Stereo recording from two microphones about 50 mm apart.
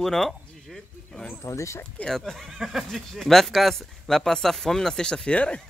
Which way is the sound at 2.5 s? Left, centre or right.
Centre.